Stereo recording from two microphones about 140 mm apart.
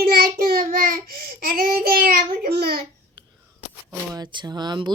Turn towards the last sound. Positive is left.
turn(degrees=-30)  # may be behind; listen again after turning